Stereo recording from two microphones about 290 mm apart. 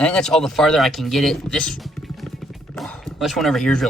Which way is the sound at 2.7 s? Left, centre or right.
Centre.